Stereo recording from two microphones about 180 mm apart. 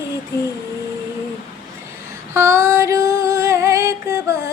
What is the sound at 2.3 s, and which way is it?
Female singing, 15° right (ahead or behind).